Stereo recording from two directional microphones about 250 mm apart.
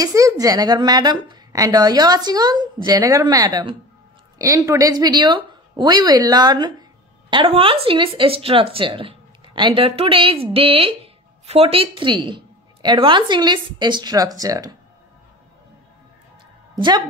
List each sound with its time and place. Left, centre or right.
0.0 s a woman's voice: centre
16.7 s a woman's voice: centre